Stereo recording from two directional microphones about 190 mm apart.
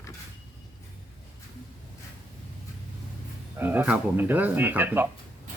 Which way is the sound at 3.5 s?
10° right (ahead or behind).